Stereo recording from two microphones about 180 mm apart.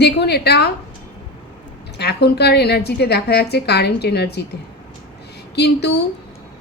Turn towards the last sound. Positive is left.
turn(degrees=70)  # may be behind; listen again after turning